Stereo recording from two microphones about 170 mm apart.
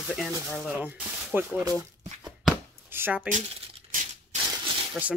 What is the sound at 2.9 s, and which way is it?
Speech, 10° right (ahead or behind).